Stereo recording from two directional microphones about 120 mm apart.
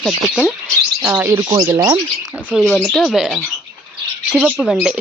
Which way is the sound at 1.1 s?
20° right (ahead or behind).